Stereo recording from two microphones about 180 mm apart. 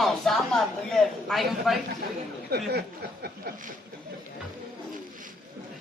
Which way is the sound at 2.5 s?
60° right (ahead or behind).